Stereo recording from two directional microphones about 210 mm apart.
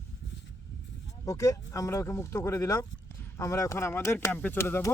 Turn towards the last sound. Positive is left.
turn(degrees=10)  # may be behind; listen again after turning